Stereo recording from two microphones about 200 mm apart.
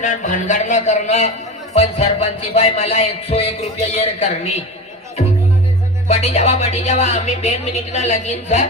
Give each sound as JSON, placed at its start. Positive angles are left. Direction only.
{"t": 0.0, "sound": "music", "side_deg": 40}
{"t": 6.1, "sound": "music", "side_deg": 30}